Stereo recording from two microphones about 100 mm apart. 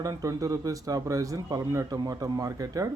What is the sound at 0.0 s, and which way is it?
Speech, 35° right (ahead or behind).